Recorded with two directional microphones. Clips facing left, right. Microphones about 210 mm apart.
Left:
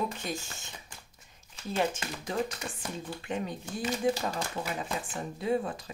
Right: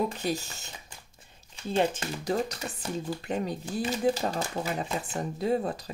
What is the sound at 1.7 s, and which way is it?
Speech, 30° right (ahead or behind).